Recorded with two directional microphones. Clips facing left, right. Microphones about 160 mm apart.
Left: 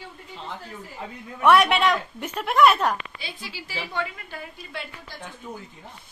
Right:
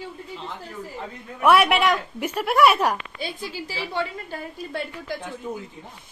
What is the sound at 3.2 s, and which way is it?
A woman's voice, 45° right (ahead or behind).